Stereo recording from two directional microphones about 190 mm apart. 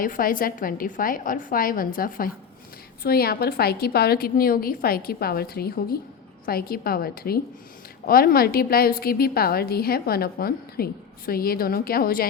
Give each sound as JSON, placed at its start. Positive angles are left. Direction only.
{"t": 0.0, "sound": "a woman's voice", "side_deg": 50}